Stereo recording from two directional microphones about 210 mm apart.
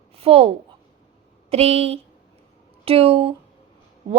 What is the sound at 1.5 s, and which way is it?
A woman's voice, 30° right (ahead or behind).